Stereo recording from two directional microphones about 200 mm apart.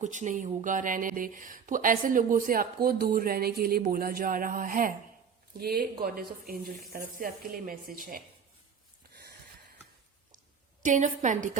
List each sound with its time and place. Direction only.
0.0 s speech: 40° right (ahead or behind)
10.8 s a woman's voice: 40° right (ahead or behind)